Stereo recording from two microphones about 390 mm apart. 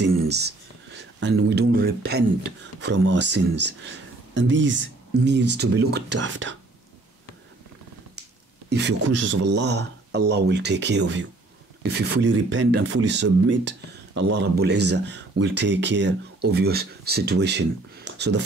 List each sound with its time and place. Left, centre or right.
0.0 s speech: right
8.6 s a sound: right
9.0 s speech: right